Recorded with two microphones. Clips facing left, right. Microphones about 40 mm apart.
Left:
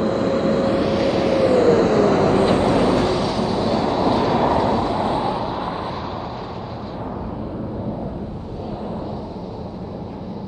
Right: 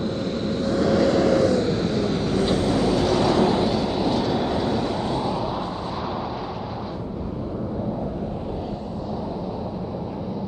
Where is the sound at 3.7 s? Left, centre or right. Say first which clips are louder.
Left 4 dB; centre.